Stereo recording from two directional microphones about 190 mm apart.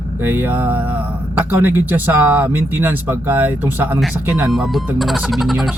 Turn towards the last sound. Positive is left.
turn(degrees=0)  # may be behind; listen again after turning